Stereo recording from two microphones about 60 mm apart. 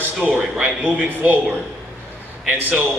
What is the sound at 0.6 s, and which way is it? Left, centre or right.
A man's voice, right.